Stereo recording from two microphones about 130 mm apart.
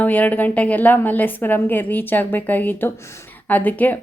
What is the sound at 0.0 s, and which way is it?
Speech, 10° left (ahead or behind).